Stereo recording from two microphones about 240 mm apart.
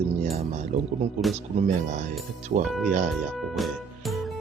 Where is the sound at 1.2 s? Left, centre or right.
Centre.